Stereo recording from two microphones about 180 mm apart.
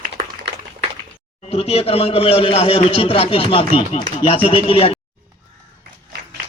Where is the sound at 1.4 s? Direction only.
35° left (ahead or behind).